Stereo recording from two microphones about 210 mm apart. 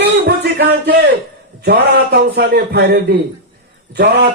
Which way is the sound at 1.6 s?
50° right (ahead or behind).